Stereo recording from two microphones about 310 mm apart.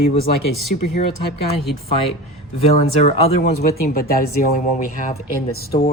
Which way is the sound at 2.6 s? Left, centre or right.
Centre.